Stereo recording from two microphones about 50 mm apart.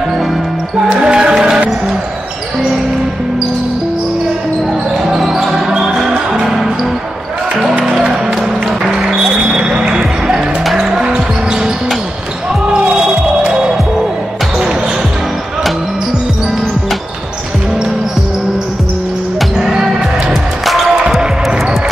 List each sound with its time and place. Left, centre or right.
0.7 s basketball bounce: centre
5.0 s basketball bounce: centre
5.7 s music: centre
7.8 s music: centre
10.8 s basketball bounce: centre
19.6 s music: centre